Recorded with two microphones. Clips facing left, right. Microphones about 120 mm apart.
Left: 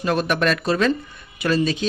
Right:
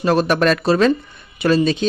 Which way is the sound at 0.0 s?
35° right (ahead or behind).